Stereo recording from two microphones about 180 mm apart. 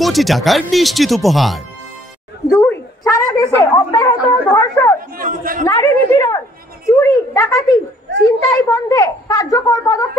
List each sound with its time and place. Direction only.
0.0 s speech: centre (ahead or behind)
2.5 s dog: 5° left (ahead or behind)
3.0 s a sound: 20° left (ahead or behind)
3.7 s a child's voice: 20° left (ahead or behind)
5.1 s a man's voice: 50° right (ahead or behind)
5.7 s a child's voice: 20° left (ahead or behind)
7.0 s a sound: 15° left (ahead or behind)
8.6 s a child's voice: 20° left (ahead or behind)